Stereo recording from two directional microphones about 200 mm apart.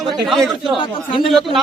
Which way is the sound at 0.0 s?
Centre (ahead or behind).